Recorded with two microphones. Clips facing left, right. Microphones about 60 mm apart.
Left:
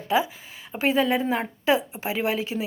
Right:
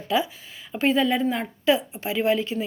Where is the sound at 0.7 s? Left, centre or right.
Centre.